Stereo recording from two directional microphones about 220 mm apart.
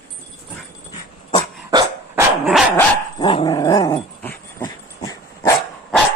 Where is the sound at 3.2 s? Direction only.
25° left (ahead or behind).